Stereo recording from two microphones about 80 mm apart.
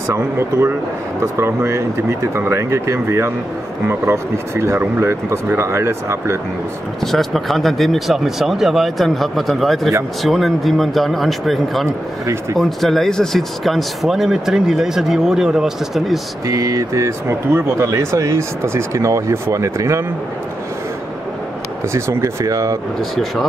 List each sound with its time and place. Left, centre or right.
0.1 s speech: right
7.1 s speech: centre
16.4 s speech: right
21.9 s speech: right